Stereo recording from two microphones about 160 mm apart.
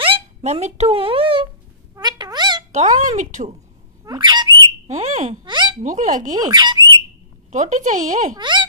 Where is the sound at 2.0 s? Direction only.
25° right (ahead or behind).